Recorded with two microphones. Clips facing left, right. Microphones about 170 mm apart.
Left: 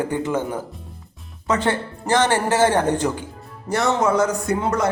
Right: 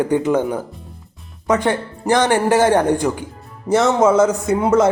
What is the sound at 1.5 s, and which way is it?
Speech, 15° right (ahead or behind).